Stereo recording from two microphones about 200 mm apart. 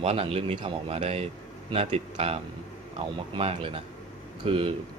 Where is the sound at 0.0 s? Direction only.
30° right (ahead or behind).